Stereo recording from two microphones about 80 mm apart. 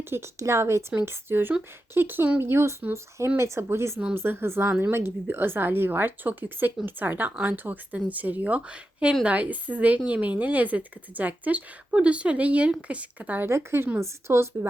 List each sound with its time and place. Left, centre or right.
0.0 s a woman's voice: right
13.5 s speech: right